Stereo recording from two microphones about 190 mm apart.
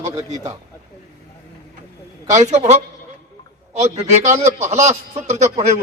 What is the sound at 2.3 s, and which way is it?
A man's voice, 40° right (ahead or behind).